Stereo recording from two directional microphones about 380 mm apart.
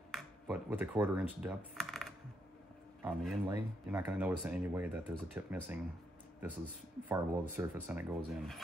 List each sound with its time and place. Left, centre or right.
0.1 s speech: centre
7.1 s speech: centre